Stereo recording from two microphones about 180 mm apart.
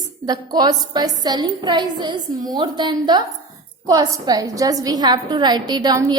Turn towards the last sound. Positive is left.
turn(degrees=-20)  # may be behind; listen again after turning